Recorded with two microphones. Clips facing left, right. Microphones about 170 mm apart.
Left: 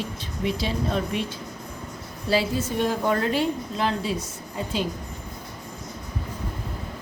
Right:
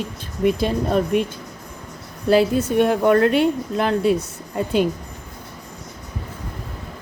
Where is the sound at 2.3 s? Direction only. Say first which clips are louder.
Right 8 dB; 60° right (ahead or behind).